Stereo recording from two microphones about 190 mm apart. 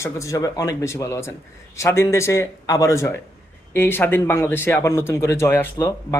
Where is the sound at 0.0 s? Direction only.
15° left (ahead or behind).